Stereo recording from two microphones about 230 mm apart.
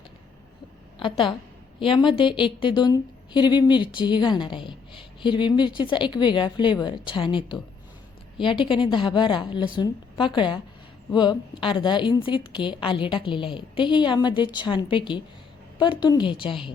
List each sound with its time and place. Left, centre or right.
0.9 s a woman's voice: left